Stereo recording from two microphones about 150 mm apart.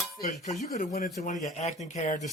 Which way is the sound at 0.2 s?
55° left (ahead or behind).